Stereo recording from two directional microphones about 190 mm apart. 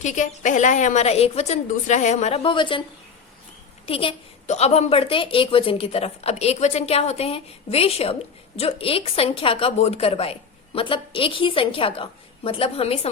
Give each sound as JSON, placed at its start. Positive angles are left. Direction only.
{"t": 0.0, "sound": "a woman's voice", "side_deg": 40}
{"t": 3.8, "sound": "a woman's voice", "side_deg": 30}